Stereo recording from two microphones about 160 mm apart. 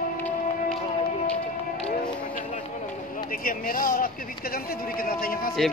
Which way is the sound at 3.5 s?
60° left (ahead or behind).